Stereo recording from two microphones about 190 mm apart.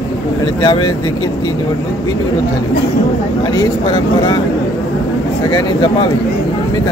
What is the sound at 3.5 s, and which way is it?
Speech, 20° left (ahead or behind).